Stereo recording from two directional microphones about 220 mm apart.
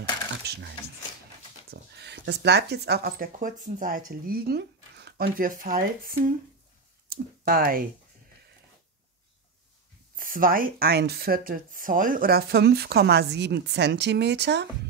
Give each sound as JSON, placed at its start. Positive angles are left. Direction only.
{"t": 1.7, "sound": "speech", "side_deg": -50}
{"t": 10.1, "sound": "speech", "side_deg": -40}